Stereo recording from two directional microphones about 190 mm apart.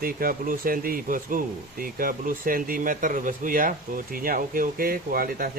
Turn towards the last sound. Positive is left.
turn(degrees=-50)  # may be behind; listen again after turning